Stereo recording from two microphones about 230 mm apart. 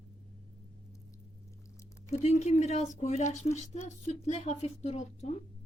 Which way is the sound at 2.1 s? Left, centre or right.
Left.